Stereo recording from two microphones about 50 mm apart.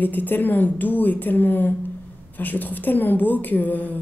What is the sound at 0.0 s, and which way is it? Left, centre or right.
A woman's voice, left.